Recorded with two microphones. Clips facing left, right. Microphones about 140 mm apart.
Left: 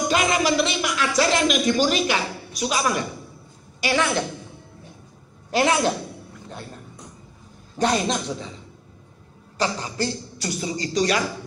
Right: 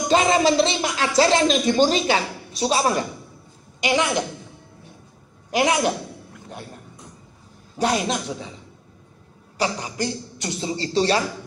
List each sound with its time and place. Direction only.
0.1 s a sound: 30° right (ahead or behind)
3.8 s a man's voice: 20° right (ahead or behind)
5.5 s a man's voice: 15° right (ahead or behind)
7.7 s a man's voice: 10° right (ahead or behind)
9.6 s speech: 15° right (ahead or behind); by 11.2 s 30° right (ahead or behind)